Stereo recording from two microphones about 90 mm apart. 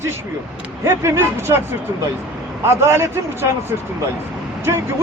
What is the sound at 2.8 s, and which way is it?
Speech, 30° right (ahead or behind).